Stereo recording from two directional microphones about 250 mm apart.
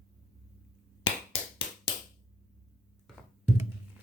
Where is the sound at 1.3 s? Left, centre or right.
Centre.